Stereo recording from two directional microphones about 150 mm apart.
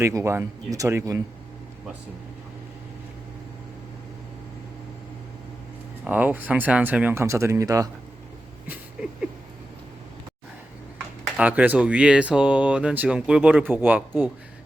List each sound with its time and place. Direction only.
0.0 s speech: 20° right (ahead or behind)
6.1 s speech: 10° right (ahead or behind)
8.6 s a sound: 10° right (ahead or behind)
10.9 s speech: 10° right (ahead or behind)